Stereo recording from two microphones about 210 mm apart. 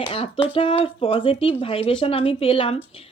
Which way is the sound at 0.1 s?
25° left (ahead or behind).